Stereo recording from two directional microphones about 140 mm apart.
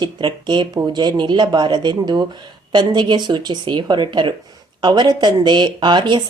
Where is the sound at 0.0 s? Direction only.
35° right (ahead or behind).